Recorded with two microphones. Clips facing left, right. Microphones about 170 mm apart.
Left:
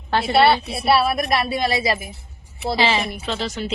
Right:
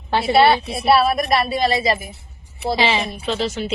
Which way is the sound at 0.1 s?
Centre (ahead or behind).